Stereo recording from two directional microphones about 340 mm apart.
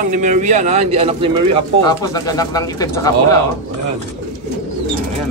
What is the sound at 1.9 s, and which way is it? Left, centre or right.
Speech, centre.